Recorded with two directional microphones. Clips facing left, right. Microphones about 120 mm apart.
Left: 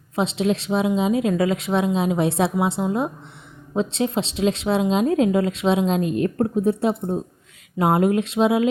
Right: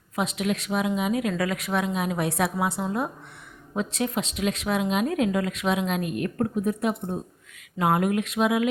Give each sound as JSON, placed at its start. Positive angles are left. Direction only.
{"t": 0.2, "sound": "speech", "side_deg": 25}